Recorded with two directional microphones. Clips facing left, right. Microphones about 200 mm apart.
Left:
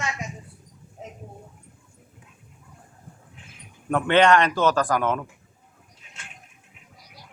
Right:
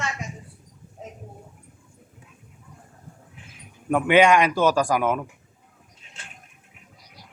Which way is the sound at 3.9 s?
10° right (ahead or behind).